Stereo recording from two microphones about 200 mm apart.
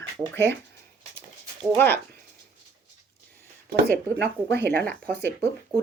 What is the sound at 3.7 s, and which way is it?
Speech, 55° right (ahead or behind).